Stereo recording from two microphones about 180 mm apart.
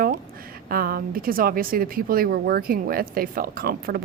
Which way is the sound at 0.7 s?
55° right (ahead or behind).